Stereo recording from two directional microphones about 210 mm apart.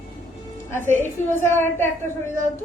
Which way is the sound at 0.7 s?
10° left (ahead or behind).